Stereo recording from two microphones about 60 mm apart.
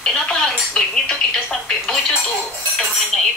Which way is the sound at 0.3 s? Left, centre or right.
Centre.